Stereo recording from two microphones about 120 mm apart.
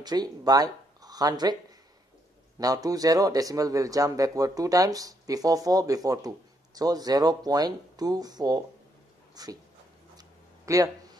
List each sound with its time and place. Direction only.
0.0 s speech: 35° right (ahead or behind)
2.6 s speech: 30° right (ahead or behind)
10.1 s a sound: 30° right (ahead or behind)